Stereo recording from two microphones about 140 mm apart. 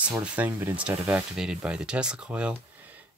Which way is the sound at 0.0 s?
10° right (ahead or behind).